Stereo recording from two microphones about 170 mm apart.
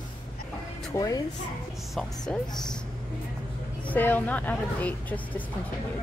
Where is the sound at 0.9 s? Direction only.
20° left (ahead or behind).